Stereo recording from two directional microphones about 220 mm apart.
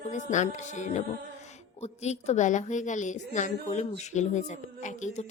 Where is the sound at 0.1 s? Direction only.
35° left (ahead or behind).